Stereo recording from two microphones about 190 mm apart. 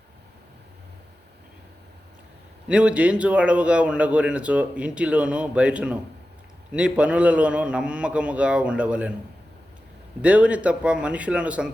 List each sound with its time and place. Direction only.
2.6 s speech: 5° right (ahead or behind)
10.2 s speech: 5° right (ahead or behind)